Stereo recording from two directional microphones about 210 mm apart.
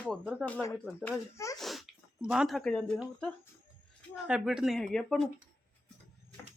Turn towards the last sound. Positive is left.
turn(degrees=5)  # may be behind; listen again after turning